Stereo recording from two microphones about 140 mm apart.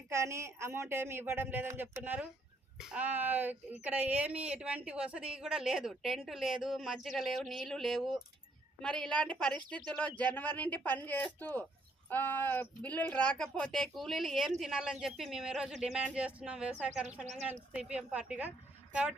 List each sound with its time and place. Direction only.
0.1 s a woman's voice: 20° right (ahead or behind)
17.2 s speech: 55° right (ahead or behind)
17.7 s speech: 5° right (ahead or behind)